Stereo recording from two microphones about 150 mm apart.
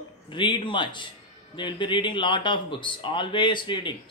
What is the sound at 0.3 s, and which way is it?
Speech, 35° left (ahead or behind).